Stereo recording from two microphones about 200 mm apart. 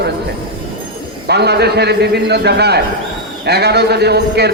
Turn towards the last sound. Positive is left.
turn(degrees=-55)  # may be behind; listen again after turning